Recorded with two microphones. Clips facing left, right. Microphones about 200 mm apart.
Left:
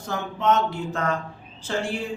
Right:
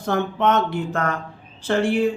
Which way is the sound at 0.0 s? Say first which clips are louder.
Right 5 dB; 60° right (ahead or behind).